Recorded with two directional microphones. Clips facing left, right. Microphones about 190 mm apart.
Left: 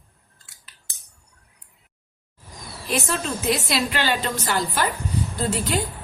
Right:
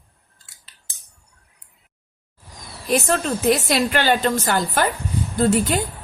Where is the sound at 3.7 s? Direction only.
50° right (ahead or behind).